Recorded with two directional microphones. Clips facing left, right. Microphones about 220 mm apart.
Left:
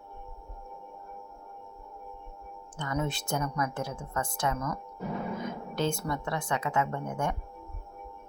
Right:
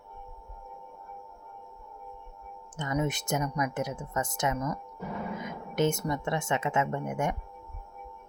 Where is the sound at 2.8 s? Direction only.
20° right (ahead or behind).